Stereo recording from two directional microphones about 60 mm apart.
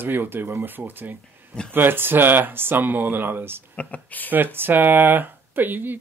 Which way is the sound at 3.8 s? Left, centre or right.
Left.